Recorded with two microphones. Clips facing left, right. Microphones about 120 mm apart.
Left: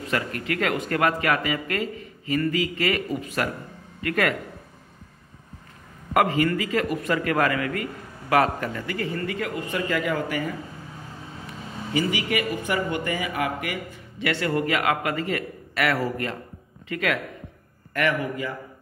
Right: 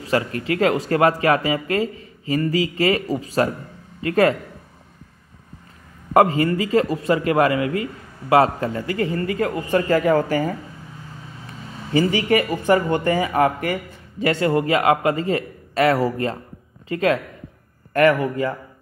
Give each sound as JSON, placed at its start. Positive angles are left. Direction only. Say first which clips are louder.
{"t": 0.0, "sound": "speech", "louder": "right 6 dB", "side_deg": -30}
{"t": 6.1, "sound": "speech", "louder": "right 5 dB", "side_deg": -30}
{"t": 11.9, "sound": "speech", "louder": "right 7 dB", "side_deg": -40}
{"t": 18.0, "sound": "speech", "louder": "right 8 dB", "side_deg": -45}